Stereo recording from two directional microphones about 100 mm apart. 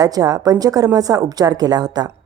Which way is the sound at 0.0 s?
40° right (ahead or behind).